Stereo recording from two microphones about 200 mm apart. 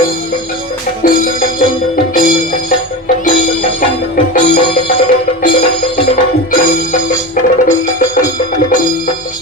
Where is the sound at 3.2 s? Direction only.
40° left (ahead or behind).